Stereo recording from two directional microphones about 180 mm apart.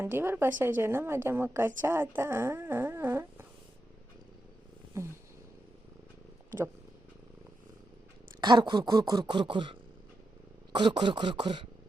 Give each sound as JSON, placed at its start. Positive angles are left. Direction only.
{"t": 0.0, "sound": "a woman's voice", "side_deg": -10}
{"t": 8.4, "sound": "speech", "side_deg": -25}